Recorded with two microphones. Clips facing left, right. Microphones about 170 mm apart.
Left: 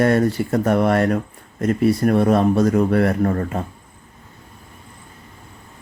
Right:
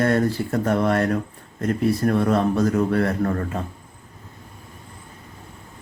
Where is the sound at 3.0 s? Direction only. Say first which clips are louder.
Left 4 dB; 35° left (ahead or behind).